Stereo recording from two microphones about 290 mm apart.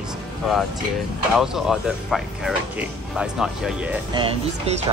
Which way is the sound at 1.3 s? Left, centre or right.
Centre.